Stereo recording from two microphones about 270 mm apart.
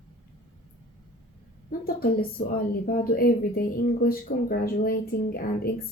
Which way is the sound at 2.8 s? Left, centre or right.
Left.